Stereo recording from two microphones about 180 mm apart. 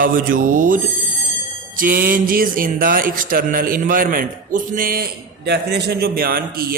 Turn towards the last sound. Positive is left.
turn(degrees=-55)  # may be behind; listen again after turning